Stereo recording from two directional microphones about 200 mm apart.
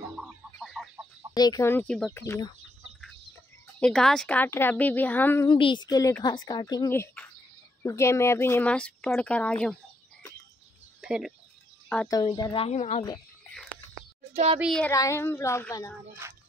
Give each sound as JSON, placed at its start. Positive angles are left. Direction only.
{"t": 1.3, "sound": "speech", "side_deg": 20}
{"t": 2.2, "sound": "speech", "side_deg": 15}
{"t": 3.8, "sound": "speech", "side_deg": 5}
{"t": 5.5, "sound": "speech", "side_deg": 25}
{"t": 11.0, "sound": "speech", "side_deg": -5}
{"t": 12.1, "sound": "speech", "side_deg": 20}
{"t": 14.3, "sound": "speech", "side_deg": -30}
{"t": 14.6, "sound": "speech", "side_deg": 0}
{"t": 14.9, "sound": "speech", "side_deg": 15}
{"t": 16.2, "sound": "speech", "side_deg": -15}